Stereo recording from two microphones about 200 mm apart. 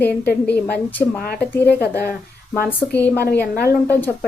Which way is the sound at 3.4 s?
50° left (ahead or behind).